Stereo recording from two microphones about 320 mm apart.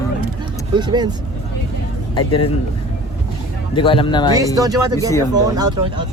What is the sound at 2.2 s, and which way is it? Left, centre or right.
Speech, centre.